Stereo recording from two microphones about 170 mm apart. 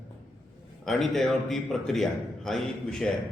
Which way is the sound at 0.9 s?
Centre (ahead or behind).